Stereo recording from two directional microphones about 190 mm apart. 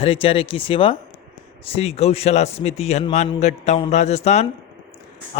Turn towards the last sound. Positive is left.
turn(degrees=35)  # may be behind; listen again after turning